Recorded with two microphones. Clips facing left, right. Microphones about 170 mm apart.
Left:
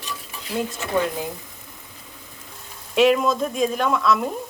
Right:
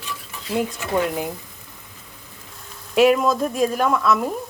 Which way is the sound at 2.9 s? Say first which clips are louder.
Right 1 dB; 5° right (ahead or behind).